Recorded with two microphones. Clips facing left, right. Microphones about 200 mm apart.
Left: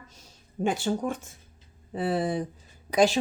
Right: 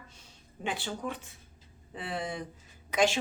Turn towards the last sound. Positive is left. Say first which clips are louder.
# left 5 dB
turn(degrees=40)  # may be behind; listen again after turning